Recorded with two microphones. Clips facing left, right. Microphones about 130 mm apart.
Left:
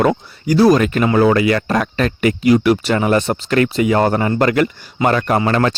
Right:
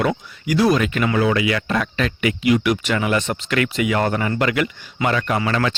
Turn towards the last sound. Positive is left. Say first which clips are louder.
# left 5 dB
turn(degrees=40)  # may be behind; listen again after turning